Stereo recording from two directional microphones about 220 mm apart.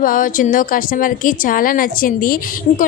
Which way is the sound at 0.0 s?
40° left (ahead or behind).